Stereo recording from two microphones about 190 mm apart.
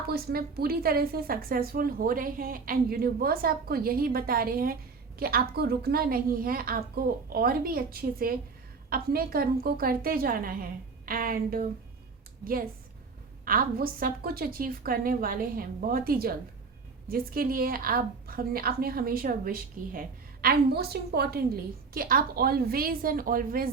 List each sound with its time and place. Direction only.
0.1 s a woman's voice: 55° right (ahead or behind)
13.4 s a woman's voice: 50° right (ahead or behind)